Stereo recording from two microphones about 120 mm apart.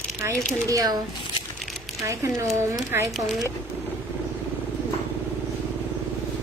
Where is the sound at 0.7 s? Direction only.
30° right (ahead or behind).